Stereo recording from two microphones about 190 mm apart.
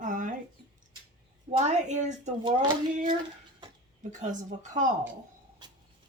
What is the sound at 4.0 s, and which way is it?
Speech, 40° right (ahead or behind).